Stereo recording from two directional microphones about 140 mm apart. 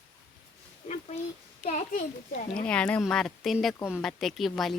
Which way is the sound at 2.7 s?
10° left (ahead or behind).